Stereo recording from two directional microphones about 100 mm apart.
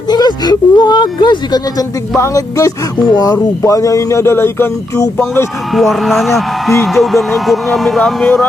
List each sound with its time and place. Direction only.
0.1 s speech: 45° left (ahead or behind)
2.1 s music: 30° left (ahead or behind)
3.3 s speech: 30° left (ahead or behind)
5.7 s speech: centre (ahead or behind)